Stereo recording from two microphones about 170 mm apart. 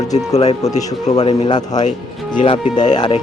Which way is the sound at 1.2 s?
35° left (ahead or behind).